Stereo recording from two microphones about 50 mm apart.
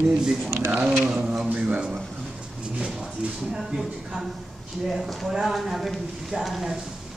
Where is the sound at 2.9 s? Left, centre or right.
Centre.